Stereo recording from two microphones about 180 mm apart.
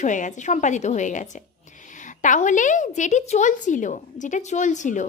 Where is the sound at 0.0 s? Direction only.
45° left (ahead or behind).